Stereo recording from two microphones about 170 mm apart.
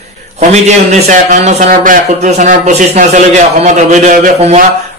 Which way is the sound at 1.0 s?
45° right (ahead or behind).